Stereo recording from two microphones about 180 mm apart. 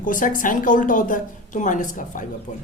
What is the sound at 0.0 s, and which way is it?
A woman's voice, 50° left (ahead or behind).